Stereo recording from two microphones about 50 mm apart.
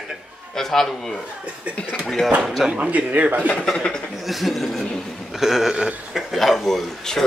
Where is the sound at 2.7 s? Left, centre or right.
Right.